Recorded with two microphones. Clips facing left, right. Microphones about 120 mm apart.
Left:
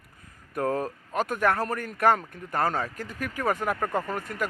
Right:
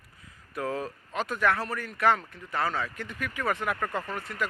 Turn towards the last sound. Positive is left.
turn(degrees=45)  # may be behind; listen again after turning